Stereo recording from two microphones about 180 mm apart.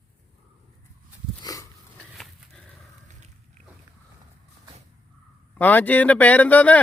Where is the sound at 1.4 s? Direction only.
20° left (ahead or behind).